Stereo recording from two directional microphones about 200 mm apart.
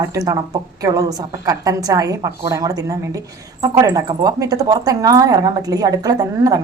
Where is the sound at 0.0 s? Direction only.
20° right (ahead or behind).